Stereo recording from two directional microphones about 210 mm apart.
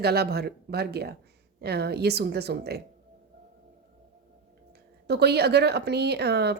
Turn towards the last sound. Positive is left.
turn(degrees=-50)  # may be behind; listen again after turning